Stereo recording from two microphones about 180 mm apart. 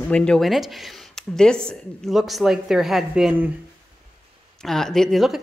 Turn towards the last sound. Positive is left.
turn(degrees=0)  # may be behind; listen again after turning